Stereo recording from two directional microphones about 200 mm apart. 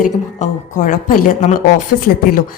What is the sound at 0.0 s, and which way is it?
Speech, 40° left (ahead or behind).